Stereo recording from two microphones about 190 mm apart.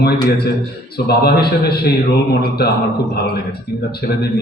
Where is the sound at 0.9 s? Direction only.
55° left (ahead or behind).